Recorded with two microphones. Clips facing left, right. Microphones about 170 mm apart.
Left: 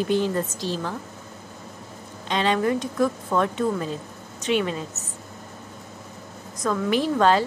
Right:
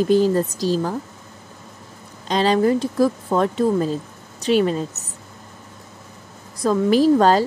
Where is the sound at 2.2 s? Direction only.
35° right (ahead or behind).